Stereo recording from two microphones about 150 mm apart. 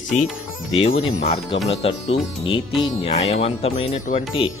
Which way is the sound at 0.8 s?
40° left (ahead or behind).